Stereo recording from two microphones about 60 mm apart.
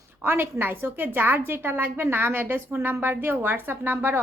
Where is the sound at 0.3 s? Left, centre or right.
Right.